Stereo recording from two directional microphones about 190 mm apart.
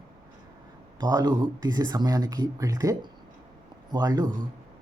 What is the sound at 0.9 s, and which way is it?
Speech, 20° right (ahead or behind).